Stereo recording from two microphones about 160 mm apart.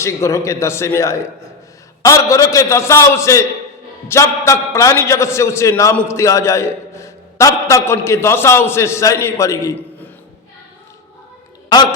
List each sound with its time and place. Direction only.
0.0 s a man's voice: 20° left (ahead or behind)
11.7 s a man's voice: 25° left (ahead or behind)